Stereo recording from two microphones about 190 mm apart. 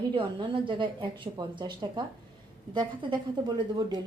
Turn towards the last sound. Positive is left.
turn(degrees=-20)  # may be behind; listen again after turning